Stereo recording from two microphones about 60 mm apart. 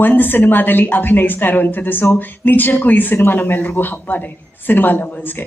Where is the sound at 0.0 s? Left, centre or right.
Left.